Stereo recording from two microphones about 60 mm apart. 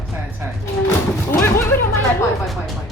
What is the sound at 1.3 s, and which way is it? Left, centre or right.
Speech, left.